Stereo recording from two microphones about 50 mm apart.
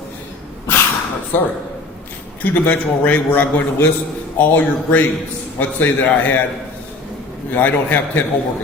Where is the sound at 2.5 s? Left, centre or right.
Left.